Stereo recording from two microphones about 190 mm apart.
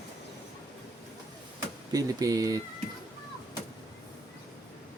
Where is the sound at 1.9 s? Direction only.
20° right (ahead or behind).